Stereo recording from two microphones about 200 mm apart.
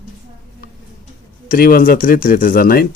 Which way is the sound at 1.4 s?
45° left (ahead or behind).